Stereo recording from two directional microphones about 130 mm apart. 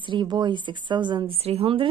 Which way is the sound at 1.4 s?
50° right (ahead or behind).